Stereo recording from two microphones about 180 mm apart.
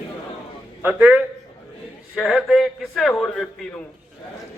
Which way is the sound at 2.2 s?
Centre (ahead or behind).